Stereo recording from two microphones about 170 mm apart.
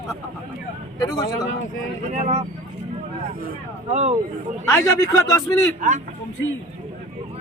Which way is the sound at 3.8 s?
40° right (ahead or behind).